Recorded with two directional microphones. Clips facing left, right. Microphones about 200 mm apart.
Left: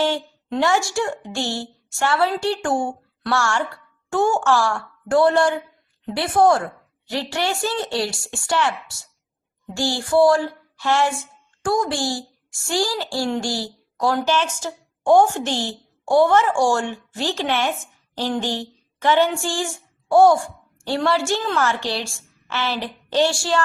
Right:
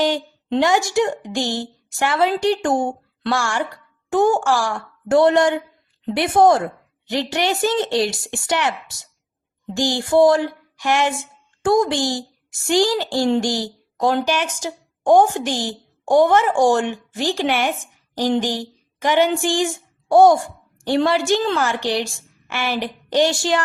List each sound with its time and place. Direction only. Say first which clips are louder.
0.5 s a woman's voice: right 3 dB; 20° right (ahead or behind)